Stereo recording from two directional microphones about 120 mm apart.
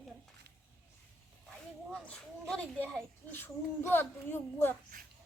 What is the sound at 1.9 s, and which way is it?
A woman's voice, 10° left (ahead or behind).